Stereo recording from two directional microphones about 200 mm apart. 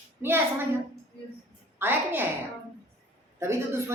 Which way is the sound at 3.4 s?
15° right (ahead or behind).